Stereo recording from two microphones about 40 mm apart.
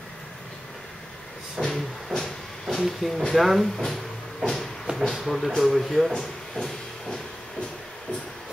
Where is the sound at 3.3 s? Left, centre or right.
Centre.